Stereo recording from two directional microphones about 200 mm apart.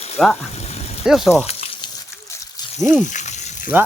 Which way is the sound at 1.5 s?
30° left (ahead or behind).